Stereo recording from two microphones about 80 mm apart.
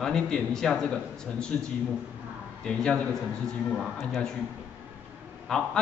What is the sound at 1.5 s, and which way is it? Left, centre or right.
A man's voice, centre.